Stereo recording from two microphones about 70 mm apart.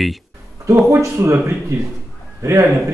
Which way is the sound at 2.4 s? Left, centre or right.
Right.